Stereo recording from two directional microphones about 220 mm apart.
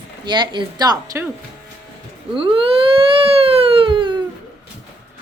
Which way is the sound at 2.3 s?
25° right (ahead or behind).